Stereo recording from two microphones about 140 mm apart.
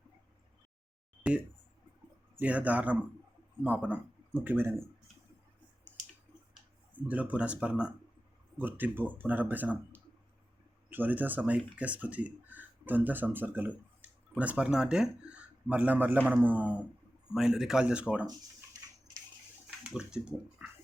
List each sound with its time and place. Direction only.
2.4 s speech: 10° right (ahead or behind)
7.1 s speech: 10° right (ahead or behind)
19.8 s speech: 5° right (ahead or behind)